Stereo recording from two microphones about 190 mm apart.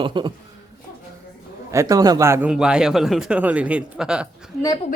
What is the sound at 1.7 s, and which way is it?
Speech, 15° right (ahead or behind).